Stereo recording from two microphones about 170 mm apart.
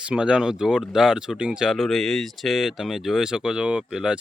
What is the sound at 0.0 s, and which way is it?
Speech, 5° right (ahead or behind).